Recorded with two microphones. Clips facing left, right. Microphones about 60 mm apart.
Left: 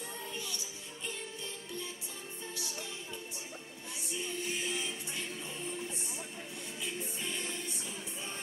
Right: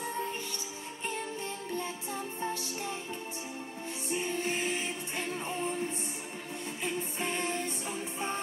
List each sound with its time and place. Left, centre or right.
0.0 s music: right
4.1 s music: right